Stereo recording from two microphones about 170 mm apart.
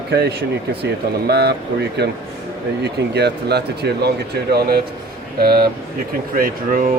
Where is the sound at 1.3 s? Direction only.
75° right (ahead or behind).